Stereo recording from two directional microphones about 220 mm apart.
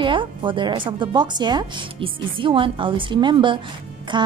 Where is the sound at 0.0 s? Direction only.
20° right (ahead or behind).